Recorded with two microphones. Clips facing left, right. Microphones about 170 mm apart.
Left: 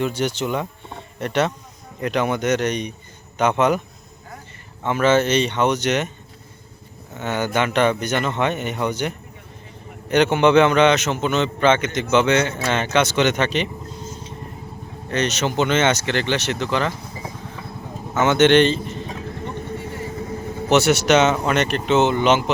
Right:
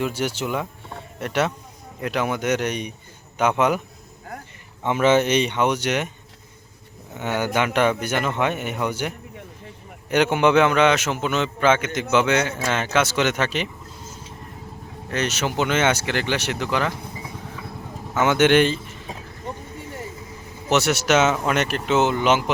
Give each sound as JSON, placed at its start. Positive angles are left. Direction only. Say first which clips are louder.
{"t": 0.0, "sound": "a man's voice", "louder": "left 2 dB", "side_deg": -5}
{"t": 4.8, "sound": "a man's voice", "louder": "even", "side_deg": -15}
{"t": 7.3, "sound": "a man's voice", "louder": "left 1 dB", "side_deg": -10}
{"t": 18.2, "sound": "a man's voice", "louder": "left 2 dB", "side_deg": -10}
{"t": 19.5, "sound": "vehicle", "louder": "left 6 dB", "side_deg": 60}
{"t": 20.7, "sound": "a man's voice", "louder": "left 4 dB", "side_deg": 0}